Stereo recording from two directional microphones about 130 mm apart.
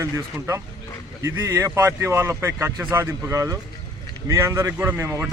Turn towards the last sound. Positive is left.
turn(degrees=-20)  # may be behind; listen again after turning